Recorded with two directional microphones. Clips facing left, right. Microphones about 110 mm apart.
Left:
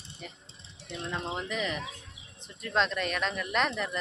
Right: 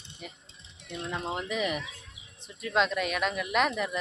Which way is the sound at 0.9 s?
5° right (ahead or behind).